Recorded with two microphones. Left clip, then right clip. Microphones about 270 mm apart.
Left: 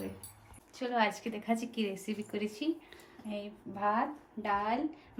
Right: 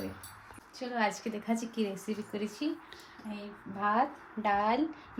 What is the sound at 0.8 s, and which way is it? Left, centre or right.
A woman's voice, centre.